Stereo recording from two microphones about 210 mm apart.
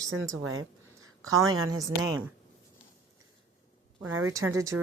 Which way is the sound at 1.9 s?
15° right (ahead or behind).